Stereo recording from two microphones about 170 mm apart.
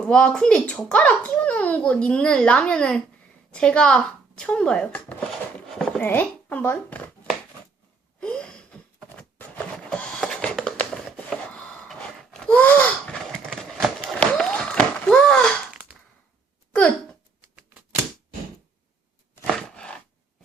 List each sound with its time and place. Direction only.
0.0 s a child's voice: 5° left (ahead or behind)
8.2 s a sound: 5° left (ahead or behind)
17.4 s typewriter: 10° right (ahead or behind)
19.5 s chopping: 5° left (ahead or behind)